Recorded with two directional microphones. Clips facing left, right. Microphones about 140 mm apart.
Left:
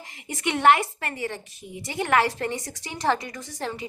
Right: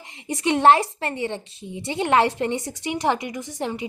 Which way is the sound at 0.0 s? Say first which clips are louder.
Right 4 dB; 25° right (ahead or behind).